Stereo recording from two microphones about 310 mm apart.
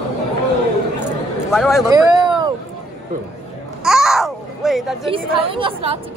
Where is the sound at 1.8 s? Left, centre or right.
Centre.